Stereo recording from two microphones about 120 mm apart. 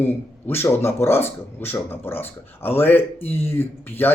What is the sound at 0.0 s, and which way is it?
Speech, 20° left (ahead or behind).